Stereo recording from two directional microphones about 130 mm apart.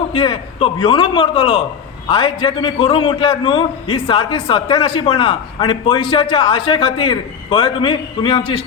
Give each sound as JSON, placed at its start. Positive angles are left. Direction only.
{"t": 0.1, "sound": "a man's voice", "side_deg": 45}